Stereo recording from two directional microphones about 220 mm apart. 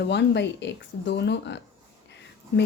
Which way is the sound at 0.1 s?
50° left (ahead or behind).